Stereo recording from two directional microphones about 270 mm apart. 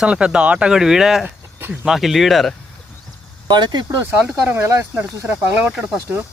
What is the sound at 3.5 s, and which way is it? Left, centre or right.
Speech, centre.